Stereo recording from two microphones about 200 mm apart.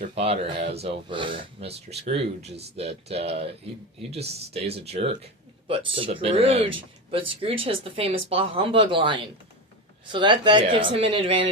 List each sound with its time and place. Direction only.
0.1 s speech: 30° right (ahead or behind)